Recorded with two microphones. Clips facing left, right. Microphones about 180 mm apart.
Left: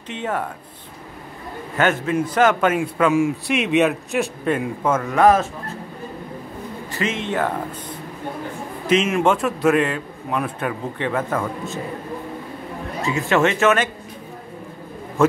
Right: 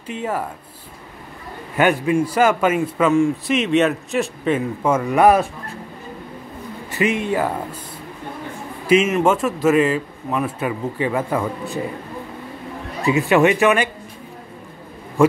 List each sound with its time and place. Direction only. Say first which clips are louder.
0.1 s a man's voice: right 1 dB; 5° right (ahead or behind)
1.8 s a man's voice: right 3 dB; 15° right (ahead or behind)
4.8 s speech: right 1 dB; 15° right (ahead or behind)
6.9 s a sound: right 5 dB; 15° right (ahead or behind)
7.2 s speech: right 2 dB; 5° right (ahead or behind)
8.8 s a man's voice: right 2 dB; 10° right (ahead or behind)
13.3 s speech: right 2 dB; 15° right (ahead or behind)